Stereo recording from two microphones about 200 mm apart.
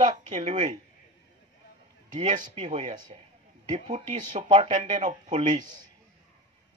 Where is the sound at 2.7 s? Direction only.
35° right (ahead or behind).